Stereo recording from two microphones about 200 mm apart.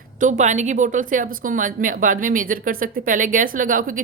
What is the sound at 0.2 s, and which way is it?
Speech, 40° right (ahead or behind).